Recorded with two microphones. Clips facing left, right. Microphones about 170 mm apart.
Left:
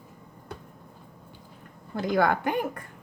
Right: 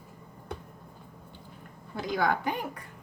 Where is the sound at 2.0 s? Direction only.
55° left (ahead or behind).